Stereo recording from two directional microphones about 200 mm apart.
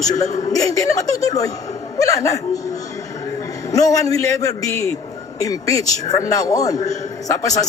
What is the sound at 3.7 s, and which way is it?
A man's voice, 15° left (ahead or behind).